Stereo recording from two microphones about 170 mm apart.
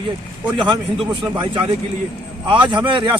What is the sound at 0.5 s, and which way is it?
Speech, 30° right (ahead or behind).